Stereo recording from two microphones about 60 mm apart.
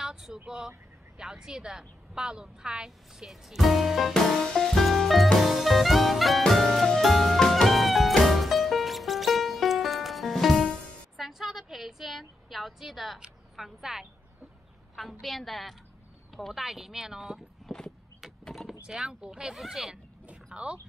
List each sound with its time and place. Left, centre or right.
0.0 s speech: centre
4.1 s music: centre
11.1 s a woman's voice: centre
18.5 s door: centre
18.9 s speech: centre
19.5 s a woman's voice: centre
20.5 s speech: centre